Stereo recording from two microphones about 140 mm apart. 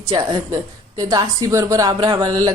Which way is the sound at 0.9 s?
25° right (ahead or behind).